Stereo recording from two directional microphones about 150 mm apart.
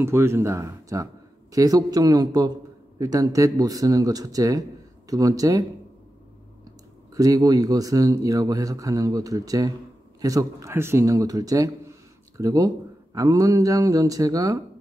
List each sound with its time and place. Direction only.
0.0 s speech: 15° right (ahead or behind)
7.2 s speech: 25° right (ahead or behind)